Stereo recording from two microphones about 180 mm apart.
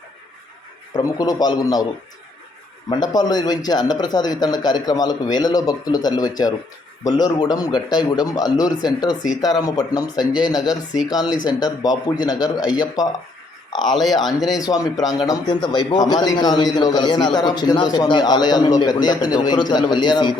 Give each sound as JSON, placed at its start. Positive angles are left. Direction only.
{"t": 0.9, "sound": "a man's voice", "side_deg": 20}
{"t": 2.9, "sound": "a man's voice", "side_deg": 20}
{"t": 14.4, "sound": "a man's voice", "side_deg": 20}